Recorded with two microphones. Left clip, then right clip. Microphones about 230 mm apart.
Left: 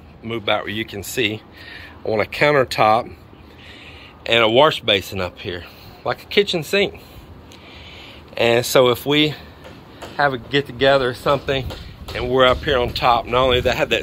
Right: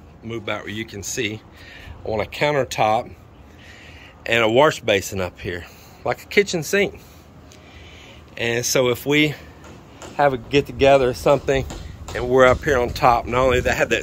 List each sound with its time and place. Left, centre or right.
0.3 s speech: centre
4.3 s speech: centre
6.7 s speech: centre
8.4 s speech: centre